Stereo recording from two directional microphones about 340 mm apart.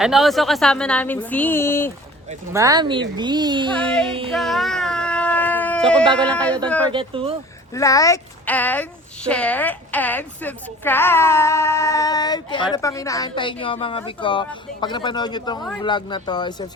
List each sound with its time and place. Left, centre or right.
0.0 s a woman's voice: centre
2.5 s speech: centre
3.7 s a woman's voice: centre
4.3 s baby cry: centre
6.1 s a woman's voice: centre
6.9 s speech: centre
7.7 s speech: centre